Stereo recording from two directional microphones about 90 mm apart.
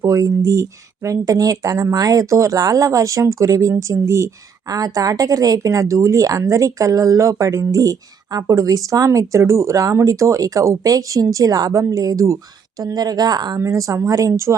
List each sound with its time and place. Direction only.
0.0 s speech: 40° right (ahead or behind)
4.7 s speech: 45° right (ahead or behind)
12.8 s speech: 45° right (ahead or behind)
13.6 s speech: 35° right (ahead or behind)